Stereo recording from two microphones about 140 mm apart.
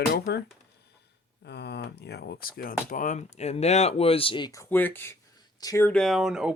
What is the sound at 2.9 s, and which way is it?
Speech, 65° left (ahead or behind).